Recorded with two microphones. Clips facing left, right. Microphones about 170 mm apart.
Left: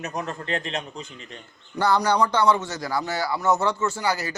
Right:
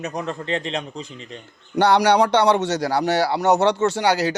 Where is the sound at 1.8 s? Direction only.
75° right (ahead or behind).